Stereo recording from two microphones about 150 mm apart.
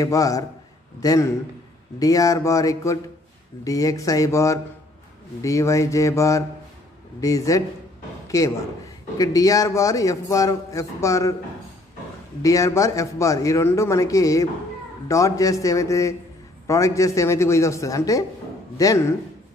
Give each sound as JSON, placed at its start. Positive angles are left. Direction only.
{"t": 0.0, "sound": "a man's voice", "side_deg": 25}
{"t": 12.4, "sound": "a man's voice", "side_deg": 20}